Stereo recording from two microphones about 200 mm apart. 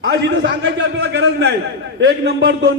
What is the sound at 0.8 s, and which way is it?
Speech, 60° right (ahead or behind).